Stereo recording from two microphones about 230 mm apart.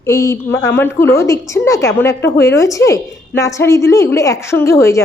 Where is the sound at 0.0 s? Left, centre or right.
Centre.